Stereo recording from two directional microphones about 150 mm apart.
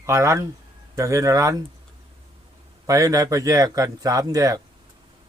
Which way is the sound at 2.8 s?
25° right (ahead or behind).